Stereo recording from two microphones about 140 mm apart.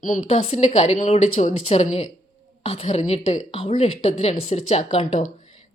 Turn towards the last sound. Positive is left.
turn(degrees=55)  # may be behind; listen again after turning